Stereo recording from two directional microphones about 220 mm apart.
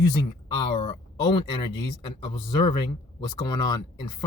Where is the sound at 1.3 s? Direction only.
20° left (ahead or behind).